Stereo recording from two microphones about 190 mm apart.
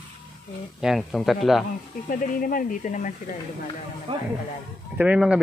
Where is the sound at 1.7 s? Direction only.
45° left (ahead or behind).